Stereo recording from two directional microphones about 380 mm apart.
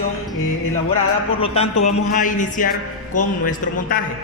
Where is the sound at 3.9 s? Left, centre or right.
Left.